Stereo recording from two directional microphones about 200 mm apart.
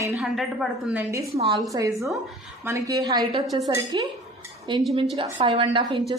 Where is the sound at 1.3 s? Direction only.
30° right (ahead or behind).